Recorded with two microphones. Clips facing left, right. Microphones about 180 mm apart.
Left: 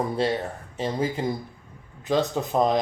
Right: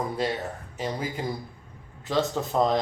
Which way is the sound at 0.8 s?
25° left (ahead or behind).